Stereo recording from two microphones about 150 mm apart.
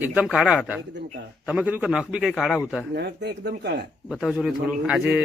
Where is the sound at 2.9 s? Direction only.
90° right.